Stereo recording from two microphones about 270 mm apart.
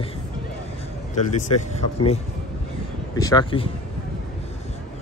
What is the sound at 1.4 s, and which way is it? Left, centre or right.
Speech, left.